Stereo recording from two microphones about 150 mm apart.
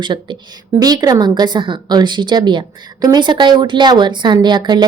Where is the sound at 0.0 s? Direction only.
30° right (ahead or behind).